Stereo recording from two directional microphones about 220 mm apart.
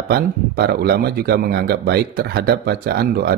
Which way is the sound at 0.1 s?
45° right (ahead or behind).